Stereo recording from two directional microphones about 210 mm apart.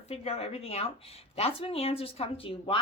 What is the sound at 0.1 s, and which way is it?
A woman's voice, 30° left (ahead or behind).